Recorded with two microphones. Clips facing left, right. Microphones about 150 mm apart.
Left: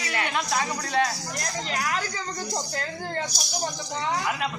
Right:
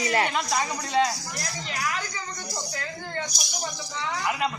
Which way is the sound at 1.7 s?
45° left (ahead or behind).